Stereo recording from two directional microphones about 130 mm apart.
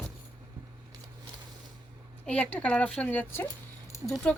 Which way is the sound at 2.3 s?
10° left (ahead or behind).